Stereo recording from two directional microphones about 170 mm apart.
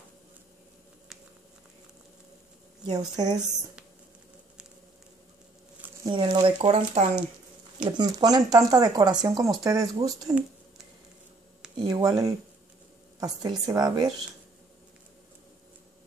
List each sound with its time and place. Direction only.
2.9 s speech: 25° right (ahead or behind)
6.0 s speech: 25° right (ahead or behind)
7.8 s speech: 25° right (ahead or behind)
11.7 s speech: 25° right (ahead or behind)